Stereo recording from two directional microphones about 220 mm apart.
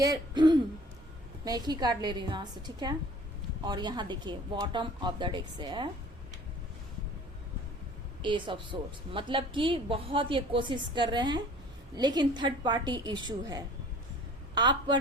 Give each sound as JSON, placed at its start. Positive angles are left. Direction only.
{"t": 0.0, "sound": "a woman's voice", "side_deg": -20}
{"t": 8.2, "sound": "a woman's voice", "side_deg": -20}